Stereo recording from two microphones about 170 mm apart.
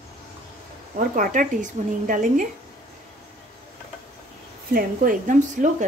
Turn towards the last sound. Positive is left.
turn(degrees=-50)  # may be behind; listen again after turning